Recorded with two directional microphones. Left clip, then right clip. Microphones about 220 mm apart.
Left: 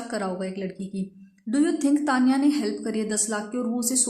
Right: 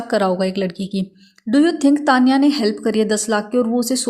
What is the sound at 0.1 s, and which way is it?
A woman's voice, 35° right (ahead or behind).